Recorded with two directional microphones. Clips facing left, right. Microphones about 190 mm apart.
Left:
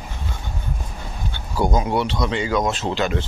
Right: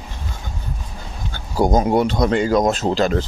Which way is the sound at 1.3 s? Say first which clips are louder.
Right 4 dB; 40° right (ahead or behind).